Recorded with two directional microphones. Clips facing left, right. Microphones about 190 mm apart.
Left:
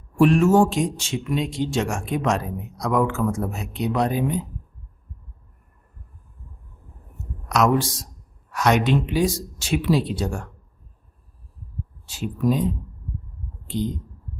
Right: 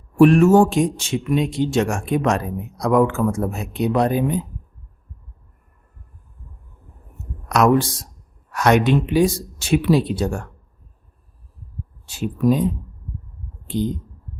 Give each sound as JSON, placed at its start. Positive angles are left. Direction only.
{"t": 0.2, "sound": "speech", "side_deg": -60}
{"t": 7.4, "sound": "speech", "side_deg": -55}
{"t": 12.0, "sound": "speech", "side_deg": -55}
{"t": 13.7, "sound": "speech", "side_deg": -55}